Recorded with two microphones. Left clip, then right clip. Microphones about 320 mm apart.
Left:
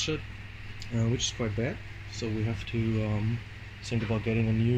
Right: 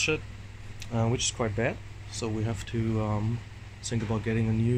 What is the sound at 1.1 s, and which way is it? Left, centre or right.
Speech, centre.